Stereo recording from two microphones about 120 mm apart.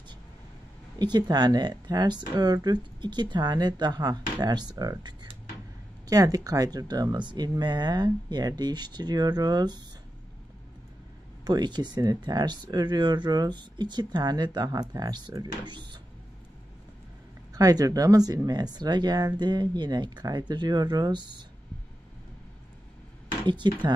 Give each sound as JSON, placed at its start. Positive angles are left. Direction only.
{"t": 0.9, "sound": "speech", "side_deg": -35}
{"t": 11.4, "sound": "speech", "side_deg": -35}
{"t": 17.6, "sound": "speech", "side_deg": -30}
{"t": 23.4, "sound": "speech", "side_deg": -40}